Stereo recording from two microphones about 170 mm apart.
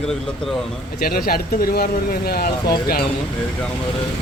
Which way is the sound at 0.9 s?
60° left (ahead or behind).